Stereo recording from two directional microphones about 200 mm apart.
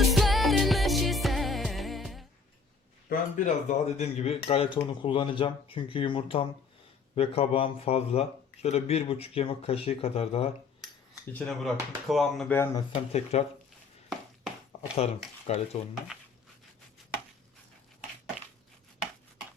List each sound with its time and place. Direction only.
0.0 s music: centre (ahead or behind)
3.1 s speech: 40° left (ahead or behind)
11.3 s speech: centre (ahead or behind)
12.5 s speech: 20° left (ahead or behind)
13.3 s speech: 30° left (ahead or behind)
14.7 s a sound: 35° left (ahead or behind)
15.4 s speech: 35° left (ahead or behind)
16.1 s a sound: centre (ahead or behind)